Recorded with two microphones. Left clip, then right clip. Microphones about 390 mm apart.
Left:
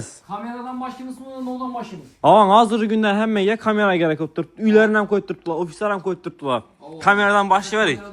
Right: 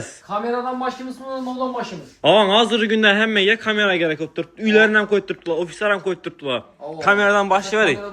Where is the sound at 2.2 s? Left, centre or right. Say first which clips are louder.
Left 2 dB; centre.